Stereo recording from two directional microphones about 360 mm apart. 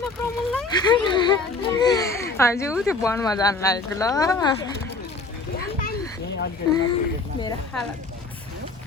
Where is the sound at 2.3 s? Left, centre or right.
Centre.